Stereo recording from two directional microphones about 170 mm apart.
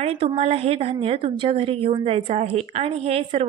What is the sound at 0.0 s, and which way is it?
A woman's voice, 35° right (ahead or behind).